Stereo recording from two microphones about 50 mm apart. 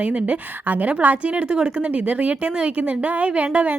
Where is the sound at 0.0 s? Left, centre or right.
Right.